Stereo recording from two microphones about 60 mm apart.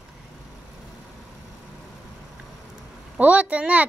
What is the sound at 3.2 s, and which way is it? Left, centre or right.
Speech, right.